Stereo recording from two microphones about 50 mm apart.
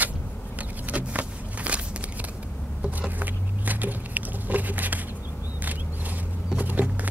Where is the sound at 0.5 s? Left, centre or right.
Right.